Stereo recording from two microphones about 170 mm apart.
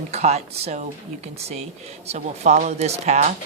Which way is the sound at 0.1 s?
40° right (ahead or behind).